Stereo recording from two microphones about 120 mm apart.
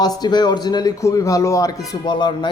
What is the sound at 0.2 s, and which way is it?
A man's voice, 35° left (ahead or behind).